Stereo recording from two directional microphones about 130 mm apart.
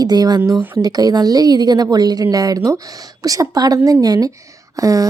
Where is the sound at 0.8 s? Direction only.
30° right (ahead or behind).